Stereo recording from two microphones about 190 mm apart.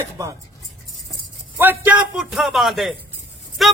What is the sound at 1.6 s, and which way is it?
A man's voice, 10° right (ahead or behind).